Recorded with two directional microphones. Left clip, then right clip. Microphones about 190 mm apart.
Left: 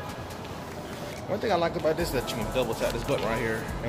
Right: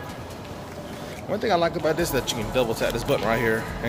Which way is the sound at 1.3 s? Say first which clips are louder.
Right 4 dB; 35° right (ahead or behind).